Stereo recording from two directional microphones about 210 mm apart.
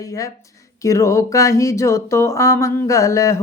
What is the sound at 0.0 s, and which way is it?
Mantra, 15° left (ahead or behind).